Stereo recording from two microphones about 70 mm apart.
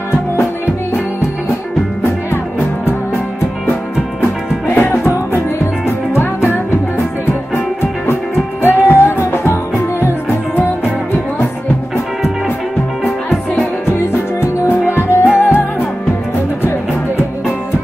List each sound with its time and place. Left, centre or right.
4.7 s music: left
8.6 s music: left
14.4 s music: left
15.2 s music: centre